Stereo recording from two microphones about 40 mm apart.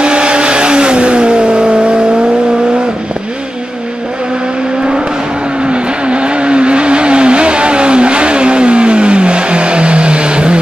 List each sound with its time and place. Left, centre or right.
0.0 s vehicle: right
5.6 s vehicle: right